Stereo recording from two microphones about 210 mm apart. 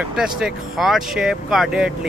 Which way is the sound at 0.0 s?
5° right (ahead or behind).